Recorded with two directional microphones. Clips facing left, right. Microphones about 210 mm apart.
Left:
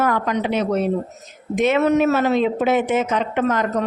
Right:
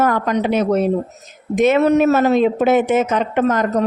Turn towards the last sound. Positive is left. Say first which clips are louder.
# right 3 dB
turn(degrees=-45)  # may be behind; listen again after turning